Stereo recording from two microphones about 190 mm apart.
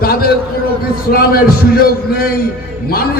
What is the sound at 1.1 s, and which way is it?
Speech, 55° left (ahead or behind).